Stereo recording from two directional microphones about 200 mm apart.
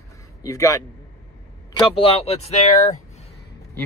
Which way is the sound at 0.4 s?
15° left (ahead or behind).